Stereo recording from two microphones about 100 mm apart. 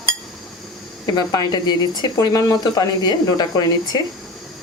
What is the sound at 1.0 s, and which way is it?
A woman's voice, 40° left (ahead or behind).